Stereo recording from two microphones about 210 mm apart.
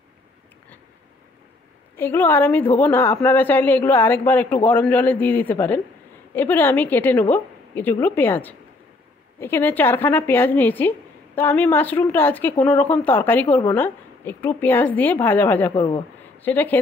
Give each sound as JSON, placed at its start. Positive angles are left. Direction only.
{"t": 2.0, "sound": "a woman's voice", "side_deg": 10}
{"t": 15.7, "sound": "speech", "side_deg": 25}
{"t": 16.4, "sound": "a woman's voice", "side_deg": 10}